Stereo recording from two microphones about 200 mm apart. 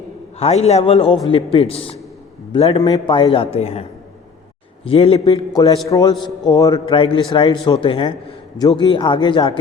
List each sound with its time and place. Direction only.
0.3 s a man's voice: 30° left (ahead or behind)
4.9 s a man's voice: 30° left (ahead or behind)